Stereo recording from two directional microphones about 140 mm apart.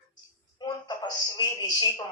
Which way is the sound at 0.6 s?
30° left (ahead or behind).